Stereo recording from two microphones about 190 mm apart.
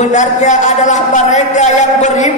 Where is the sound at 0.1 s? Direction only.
40° left (ahead or behind).